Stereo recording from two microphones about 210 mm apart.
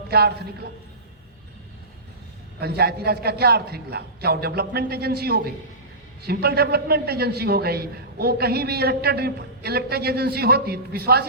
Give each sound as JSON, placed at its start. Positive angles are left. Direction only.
{"t": 0.1, "sound": "a man's voice", "side_deg": -50}
{"t": 2.6, "sound": "a man's voice", "side_deg": -50}